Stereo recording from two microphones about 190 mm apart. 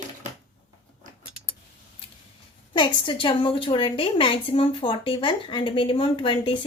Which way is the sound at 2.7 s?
25° left (ahead or behind).